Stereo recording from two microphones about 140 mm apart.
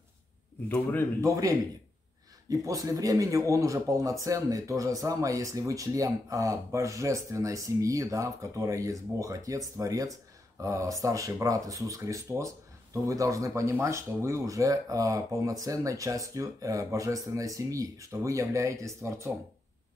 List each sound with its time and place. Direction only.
0.7 s speech: 5° left (ahead or behind)
1.2 s speech: 25° right (ahead or behind)